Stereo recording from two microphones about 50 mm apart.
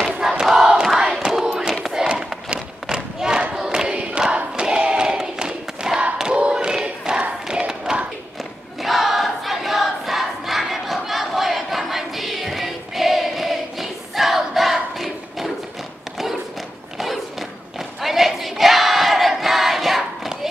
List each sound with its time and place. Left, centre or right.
0.2 s crowd: centre
1.3 s battle cry: centre
1.9 s a sound: centre
2.5 s battle cry: centre
3.5 s choir: centre
4.6 s battle cry: centre
6.1 s thump: centre
8.8 s crowd: centre
17.0 s crowd: centre